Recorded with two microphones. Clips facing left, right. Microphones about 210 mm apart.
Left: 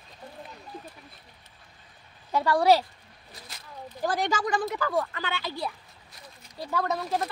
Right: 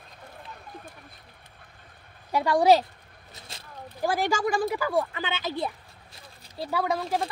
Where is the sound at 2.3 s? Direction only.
15° right (ahead or behind).